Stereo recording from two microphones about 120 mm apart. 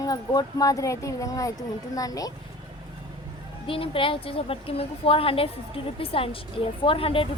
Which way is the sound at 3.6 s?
50° left (ahead or behind).